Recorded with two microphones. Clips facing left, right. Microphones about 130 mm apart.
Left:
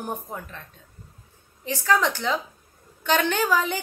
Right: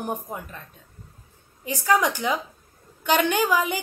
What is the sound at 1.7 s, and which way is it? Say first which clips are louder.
A woman's voice: right 1 dB; 15° right (ahead or behind).